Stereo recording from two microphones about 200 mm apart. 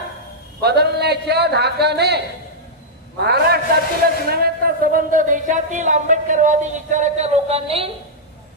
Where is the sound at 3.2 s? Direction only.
55° right (ahead or behind).